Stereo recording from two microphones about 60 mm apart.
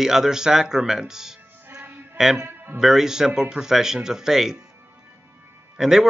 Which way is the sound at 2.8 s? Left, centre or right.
Centre.